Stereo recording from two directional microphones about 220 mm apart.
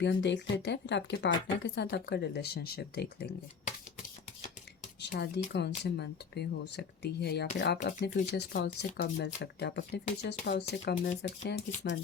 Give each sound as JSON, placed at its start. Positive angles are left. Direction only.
{"t": 0.0, "sound": "speech", "side_deg": 55}
{"t": 4.9, "sound": "speech", "side_deg": 50}